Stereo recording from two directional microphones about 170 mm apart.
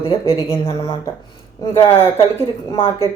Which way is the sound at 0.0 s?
30° left (ahead or behind).